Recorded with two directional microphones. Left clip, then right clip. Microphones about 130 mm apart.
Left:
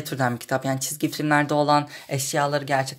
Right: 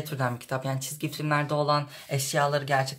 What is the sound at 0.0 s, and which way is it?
Speech, 45° left (ahead or behind).